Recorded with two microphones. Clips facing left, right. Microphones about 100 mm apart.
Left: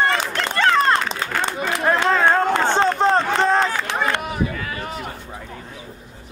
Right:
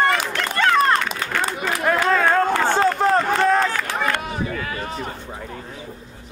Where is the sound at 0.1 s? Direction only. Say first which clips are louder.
Even; 30° left (ahead or behind).